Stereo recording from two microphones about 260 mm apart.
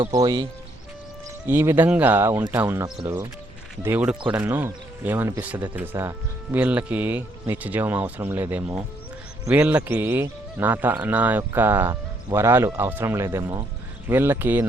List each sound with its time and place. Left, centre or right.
0.0 s speech: centre
1.5 s speech: centre